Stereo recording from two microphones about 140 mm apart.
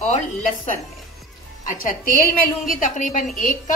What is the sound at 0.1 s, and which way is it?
A woman's voice, 60° left (ahead or behind).